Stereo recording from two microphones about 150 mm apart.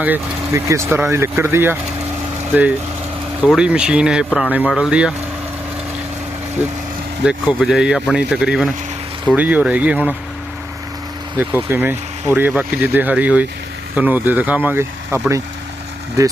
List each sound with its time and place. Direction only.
0.0 s speech: 15° right (ahead or behind)
7.3 s speech: 5° right (ahead or behind)
11.3 s speech: 10° right (ahead or behind)